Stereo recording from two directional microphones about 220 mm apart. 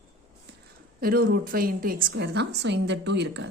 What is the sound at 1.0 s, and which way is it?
Speech, 40° right (ahead or behind).